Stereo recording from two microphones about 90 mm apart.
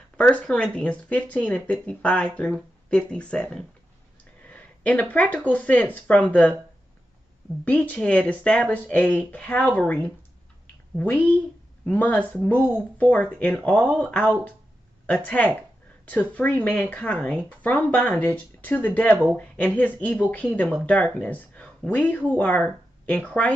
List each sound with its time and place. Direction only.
0.2 s speech: 15° left (ahead or behind)
4.2 s a sound: 15° left (ahead or behind)
5.5 s speech: 15° left (ahead or behind)
7.6 s speech: 15° left (ahead or behind)
11.8 s speech: 15° left (ahead or behind)